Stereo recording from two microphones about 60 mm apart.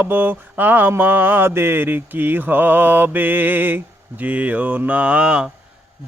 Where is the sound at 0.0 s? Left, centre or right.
Right; by 5.5 s centre.